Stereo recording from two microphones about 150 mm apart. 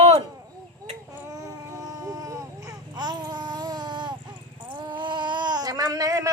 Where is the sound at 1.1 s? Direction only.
20° right (ahead or behind).